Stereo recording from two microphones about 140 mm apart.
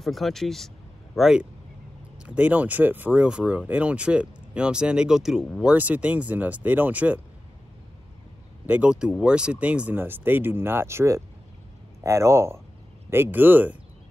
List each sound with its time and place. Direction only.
0.0 s speech: centre (ahead or behind)
8.6 s speech: 10° right (ahead or behind)